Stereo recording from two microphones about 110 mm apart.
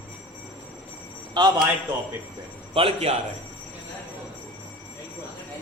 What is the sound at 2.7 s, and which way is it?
Speech, 65° right (ahead or behind).